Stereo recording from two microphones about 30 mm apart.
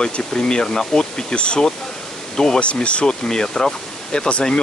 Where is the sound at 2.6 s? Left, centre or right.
Left.